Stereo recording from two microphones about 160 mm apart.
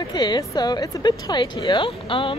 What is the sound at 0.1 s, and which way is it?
Speech, 25° left (ahead or behind).